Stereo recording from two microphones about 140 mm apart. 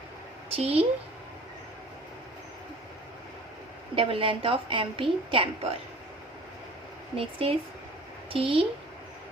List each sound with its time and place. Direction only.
0.5 s a woman's voice: 45° right (ahead or behind)
3.9 s a woman's voice: 40° right (ahead or behind)
7.2 s a woman's voice: 40° right (ahead or behind)